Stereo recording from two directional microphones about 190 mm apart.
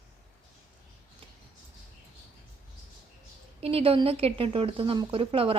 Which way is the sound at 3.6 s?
30° right (ahead or behind).